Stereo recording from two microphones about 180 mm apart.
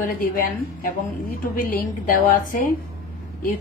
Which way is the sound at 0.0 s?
55° left (ahead or behind).